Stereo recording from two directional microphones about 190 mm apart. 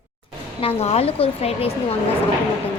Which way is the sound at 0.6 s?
35° left (ahead or behind).